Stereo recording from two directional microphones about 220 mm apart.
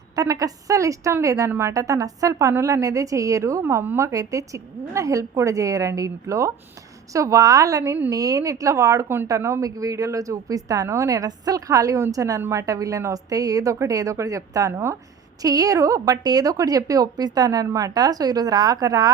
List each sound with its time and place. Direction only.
0.2 s a woman's voice: 15° right (ahead or behind)